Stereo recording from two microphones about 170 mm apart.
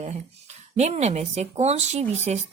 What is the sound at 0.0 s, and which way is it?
Speech, 40° right (ahead or behind).